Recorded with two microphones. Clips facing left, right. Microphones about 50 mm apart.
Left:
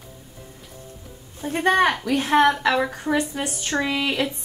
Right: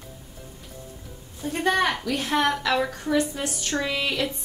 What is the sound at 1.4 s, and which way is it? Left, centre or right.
A woman's voice, left.